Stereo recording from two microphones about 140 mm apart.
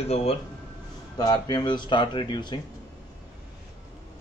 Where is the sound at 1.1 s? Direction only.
30° left (ahead or behind).